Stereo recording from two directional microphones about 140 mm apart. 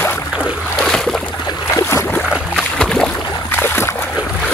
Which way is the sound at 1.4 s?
20° left (ahead or behind).